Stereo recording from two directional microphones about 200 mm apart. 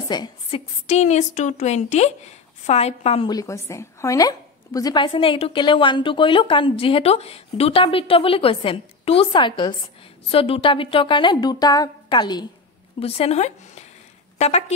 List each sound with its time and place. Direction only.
0.1 s a woman's voice: 20° left (ahead or behind)
0.8 s a woman's voice: 35° left (ahead or behind)